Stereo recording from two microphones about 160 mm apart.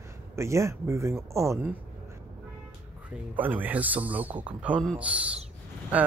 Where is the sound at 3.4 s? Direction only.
10° right (ahead or behind).